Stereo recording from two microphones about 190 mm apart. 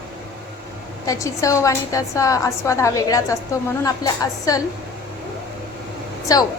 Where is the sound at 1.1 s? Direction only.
15° left (ahead or behind).